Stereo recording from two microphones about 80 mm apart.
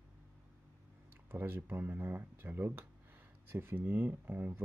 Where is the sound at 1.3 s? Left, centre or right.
Right.